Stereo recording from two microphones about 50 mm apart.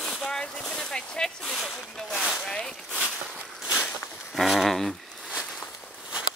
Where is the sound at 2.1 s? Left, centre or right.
Centre.